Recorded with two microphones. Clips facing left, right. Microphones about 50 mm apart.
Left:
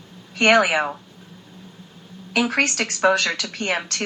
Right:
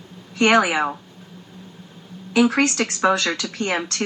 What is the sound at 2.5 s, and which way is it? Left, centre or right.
Speech, left.